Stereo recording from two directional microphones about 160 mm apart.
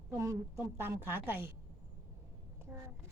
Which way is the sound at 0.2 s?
20° right (ahead or behind).